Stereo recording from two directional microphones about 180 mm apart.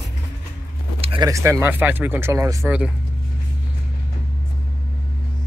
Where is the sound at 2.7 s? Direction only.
5° right (ahead or behind).